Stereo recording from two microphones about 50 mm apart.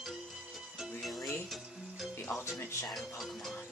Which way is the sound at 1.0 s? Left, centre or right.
Centre.